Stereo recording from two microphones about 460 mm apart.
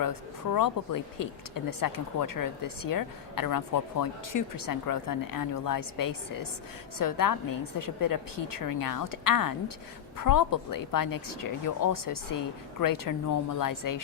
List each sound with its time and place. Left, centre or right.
0.0 s speech: left